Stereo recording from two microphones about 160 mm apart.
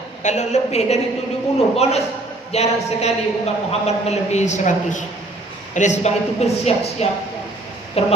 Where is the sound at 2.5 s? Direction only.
40° left (ahead or behind).